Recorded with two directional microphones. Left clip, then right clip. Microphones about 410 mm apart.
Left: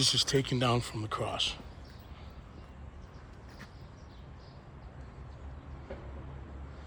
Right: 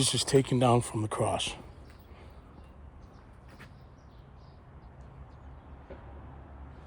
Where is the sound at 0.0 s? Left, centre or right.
Centre.